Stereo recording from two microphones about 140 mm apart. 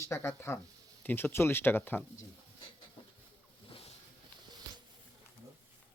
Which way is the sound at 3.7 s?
45° left (ahead or behind).